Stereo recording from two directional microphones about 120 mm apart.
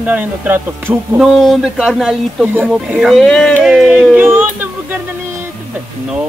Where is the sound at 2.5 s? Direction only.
15° right (ahead or behind).